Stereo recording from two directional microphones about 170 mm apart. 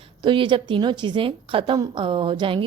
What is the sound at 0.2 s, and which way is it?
A woman's voice, 30° right (ahead or behind).